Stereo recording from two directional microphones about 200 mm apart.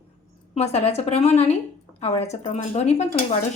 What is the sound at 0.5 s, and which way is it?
A woman's voice, 35° left (ahead or behind).